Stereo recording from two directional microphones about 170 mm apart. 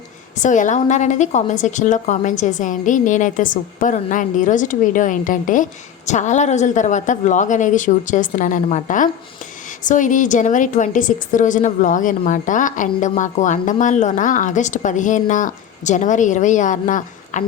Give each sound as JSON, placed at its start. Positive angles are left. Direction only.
{"t": 0.3, "sound": "a woman's voice", "side_deg": 45}